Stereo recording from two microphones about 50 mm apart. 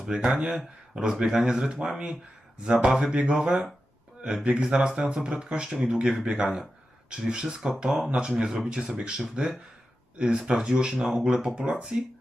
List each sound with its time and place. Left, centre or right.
0.1 s speech: centre
4.6 s speech: centre